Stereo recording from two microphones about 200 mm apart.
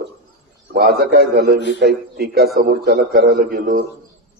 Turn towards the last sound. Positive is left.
turn(degrees=-50)  # may be behind; listen again after turning